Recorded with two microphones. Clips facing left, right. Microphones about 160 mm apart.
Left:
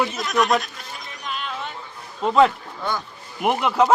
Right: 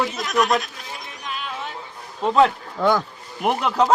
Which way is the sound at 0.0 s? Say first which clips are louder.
Even; centre (ahead or behind).